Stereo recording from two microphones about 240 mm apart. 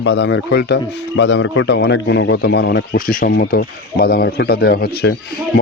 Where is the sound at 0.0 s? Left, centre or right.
Left.